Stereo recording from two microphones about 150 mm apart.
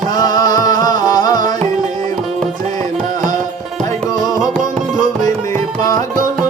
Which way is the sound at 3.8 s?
25° left (ahead or behind).